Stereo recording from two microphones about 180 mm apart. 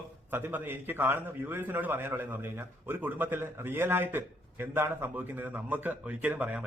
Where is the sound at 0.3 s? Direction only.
10° right (ahead or behind).